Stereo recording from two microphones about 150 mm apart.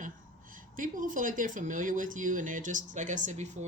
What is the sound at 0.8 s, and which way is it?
Speech, 60° right (ahead or behind).